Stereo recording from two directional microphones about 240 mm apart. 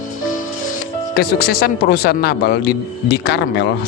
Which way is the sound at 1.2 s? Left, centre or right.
Left.